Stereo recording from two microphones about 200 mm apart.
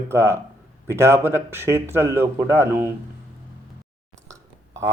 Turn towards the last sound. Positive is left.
turn(degrees=-15)  # may be behind; listen again after turning